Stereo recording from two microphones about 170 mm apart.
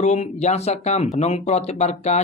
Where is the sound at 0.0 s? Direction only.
40° left (ahead or behind).